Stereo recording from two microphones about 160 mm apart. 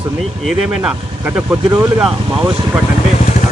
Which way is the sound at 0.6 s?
5° right (ahead or behind).